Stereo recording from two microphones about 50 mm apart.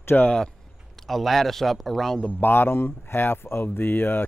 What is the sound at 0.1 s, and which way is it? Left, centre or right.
Speech, left.